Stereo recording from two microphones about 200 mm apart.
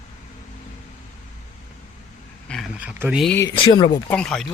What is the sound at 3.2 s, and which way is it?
Speech, 10° left (ahead or behind).